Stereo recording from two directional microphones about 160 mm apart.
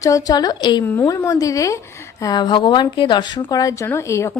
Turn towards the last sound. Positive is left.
turn(degrees=15)  # may be behind; listen again after turning